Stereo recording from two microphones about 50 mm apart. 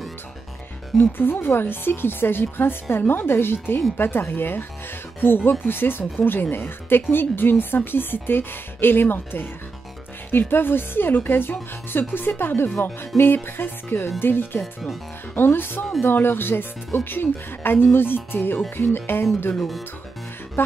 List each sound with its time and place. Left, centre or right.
1.1 s speech: left
14.6 s speech: centre
15.3 s speech: left
19.5 s speech: centre
20.6 s music: left